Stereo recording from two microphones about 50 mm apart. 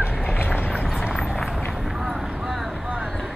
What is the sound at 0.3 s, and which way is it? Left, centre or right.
Vehicle, left.